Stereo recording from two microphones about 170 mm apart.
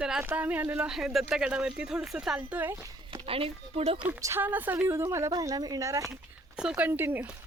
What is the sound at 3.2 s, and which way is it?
Speech, 35° right (ahead or behind).